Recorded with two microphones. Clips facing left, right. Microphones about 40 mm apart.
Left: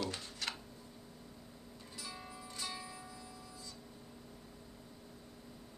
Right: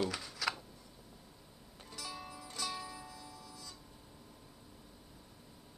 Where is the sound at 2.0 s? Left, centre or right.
Right.